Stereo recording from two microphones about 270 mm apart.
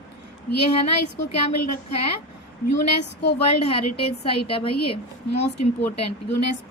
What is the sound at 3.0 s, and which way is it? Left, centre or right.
Speech, left.